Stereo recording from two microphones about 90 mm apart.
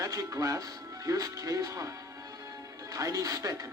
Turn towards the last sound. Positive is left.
turn(degrees=-40)  # may be behind; listen again after turning